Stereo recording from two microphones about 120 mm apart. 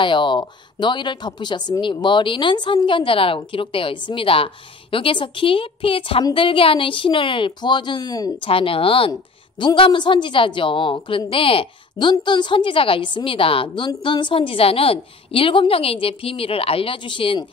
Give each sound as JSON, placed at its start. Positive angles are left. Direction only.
{"t": 0.0, "sound": "a woman's voice", "side_deg": 40}
{"t": 8.4, "sound": "a woman's voice", "side_deg": 50}